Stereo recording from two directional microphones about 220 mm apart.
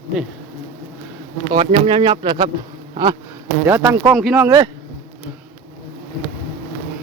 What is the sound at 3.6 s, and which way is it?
Speech, 10° right (ahead or behind).